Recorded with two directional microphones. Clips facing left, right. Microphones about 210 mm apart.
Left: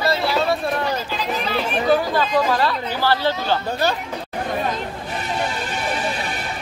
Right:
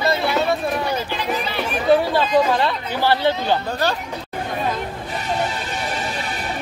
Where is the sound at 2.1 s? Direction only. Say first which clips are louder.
Right 2 dB; 25° right (ahead or behind).